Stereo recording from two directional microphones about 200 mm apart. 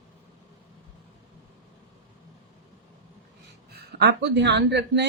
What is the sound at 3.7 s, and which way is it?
A woman's voice, 60° right (ahead or behind).